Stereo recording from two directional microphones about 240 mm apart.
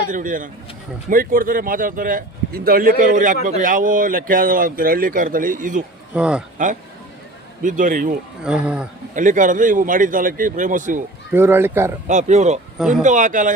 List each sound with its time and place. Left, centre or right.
0.1 s speech: right
6.1 s speech: centre
7.6 s speech: right
8.4 s speech: centre
9.1 s speech: right
11.3 s speech: centre
12.0 s speech: right